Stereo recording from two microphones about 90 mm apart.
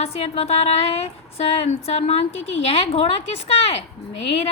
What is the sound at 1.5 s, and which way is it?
A woman's voice, 90° left.